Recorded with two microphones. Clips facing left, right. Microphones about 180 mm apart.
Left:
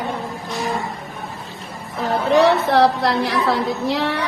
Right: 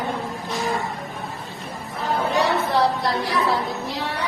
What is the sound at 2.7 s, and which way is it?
Music, 70° left (ahead or behind).